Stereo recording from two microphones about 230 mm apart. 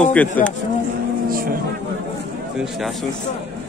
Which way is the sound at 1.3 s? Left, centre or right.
Right.